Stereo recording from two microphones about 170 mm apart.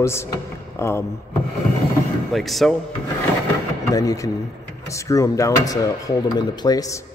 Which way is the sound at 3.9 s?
20° left (ahead or behind).